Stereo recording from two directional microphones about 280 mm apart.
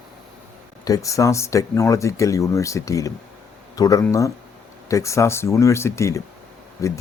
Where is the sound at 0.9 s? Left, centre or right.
Centre.